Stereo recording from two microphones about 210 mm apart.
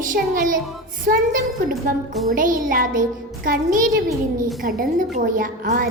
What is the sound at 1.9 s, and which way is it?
A woman's voice, 40° right (ahead or behind).